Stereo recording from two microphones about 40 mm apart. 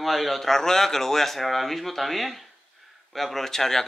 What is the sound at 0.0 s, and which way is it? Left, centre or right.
A man's voice, centre.